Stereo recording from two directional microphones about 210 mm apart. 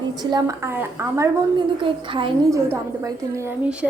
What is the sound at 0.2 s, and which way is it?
A woman's voice, 20° right (ahead or behind).